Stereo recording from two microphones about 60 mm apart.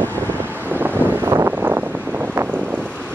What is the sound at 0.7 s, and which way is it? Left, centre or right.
Wind noise, right.